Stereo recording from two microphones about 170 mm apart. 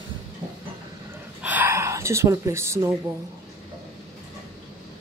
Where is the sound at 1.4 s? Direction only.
10° right (ahead or behind).